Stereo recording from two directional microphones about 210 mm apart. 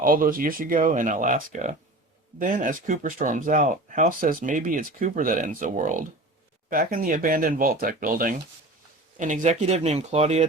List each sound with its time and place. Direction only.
0.0 s speech: 40° right (ahead or behind)